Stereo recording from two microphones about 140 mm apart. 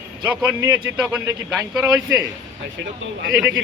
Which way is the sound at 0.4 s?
15° right (ahead or behind).